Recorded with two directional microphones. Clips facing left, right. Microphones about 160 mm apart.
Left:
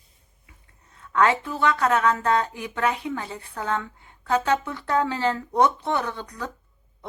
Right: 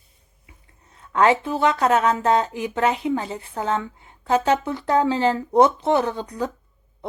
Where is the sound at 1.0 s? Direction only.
30° right (ahead or behind).